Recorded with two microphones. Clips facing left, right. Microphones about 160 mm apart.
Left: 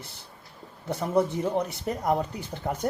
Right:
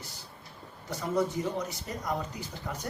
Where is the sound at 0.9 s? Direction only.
60° left (ahead or behind).